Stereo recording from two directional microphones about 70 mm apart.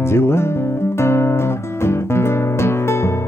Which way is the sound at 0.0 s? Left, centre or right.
Left.